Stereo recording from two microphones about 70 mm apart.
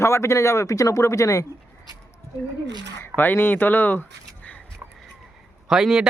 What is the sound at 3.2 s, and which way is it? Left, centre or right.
Speech, left.